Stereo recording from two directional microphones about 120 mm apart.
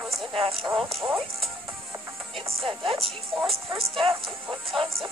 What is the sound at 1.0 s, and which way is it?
Music, centre (ahead or behind).